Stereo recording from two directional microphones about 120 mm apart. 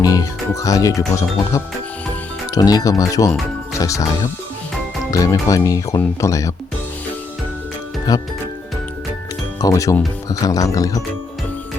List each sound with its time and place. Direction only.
0.0 s speech: 30° left (ahead or behind)
8.1 s speech: 30° left (ahead or behind)
9.6 s speech: 30° left (ahead or behind)